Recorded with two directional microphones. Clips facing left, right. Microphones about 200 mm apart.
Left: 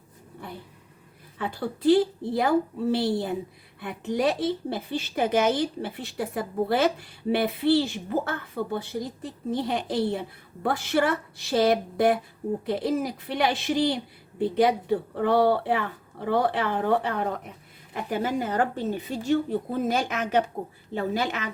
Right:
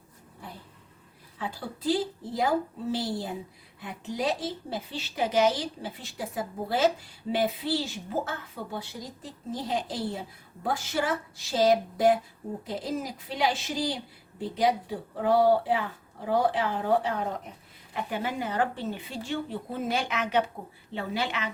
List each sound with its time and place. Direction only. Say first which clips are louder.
1.4 s a woman's voice: left 6 dB; 60° left (ahead or behind)
17.9 s a woman's voice: left 4 dB; 40° left (ahead or behind)